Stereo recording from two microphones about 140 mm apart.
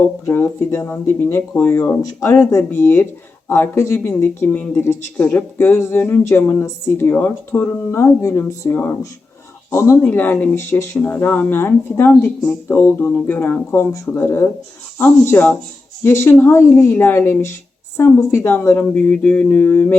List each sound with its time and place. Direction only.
0.0 s speech: 15° left (ahead or behind)